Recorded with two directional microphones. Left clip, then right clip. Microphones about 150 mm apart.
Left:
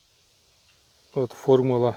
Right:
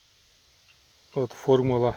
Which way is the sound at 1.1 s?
20° left (ahead or behind).